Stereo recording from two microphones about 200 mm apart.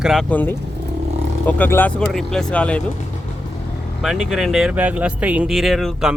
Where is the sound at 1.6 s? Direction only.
10° left (ahead or behind).